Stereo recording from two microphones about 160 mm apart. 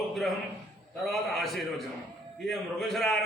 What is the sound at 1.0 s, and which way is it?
A man's voice, centre (ahead or behind).